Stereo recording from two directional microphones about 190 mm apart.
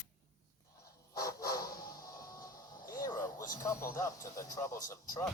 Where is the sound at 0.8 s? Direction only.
15° left (ahead or behind).